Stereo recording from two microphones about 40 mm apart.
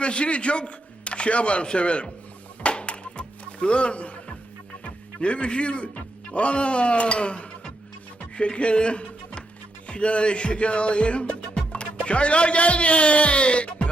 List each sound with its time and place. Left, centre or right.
0.0 s speech: left
2.6 s music: left
4.8 s speech: left
9.8 s music: left